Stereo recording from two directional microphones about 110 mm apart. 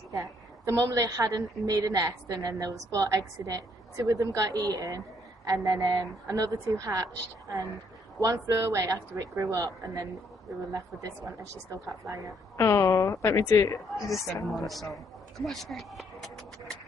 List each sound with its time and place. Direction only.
0.1 s a woman's voice: 25° right (ahead or behind)
12.1 s a woman's voice: 30° right (ahead or behind)
12.5 s a woman's voice: 25° left (ahead or behind)
13.8 s speech: centre (ahead or behind)
14.5 s a sound: centre (ahead or behind)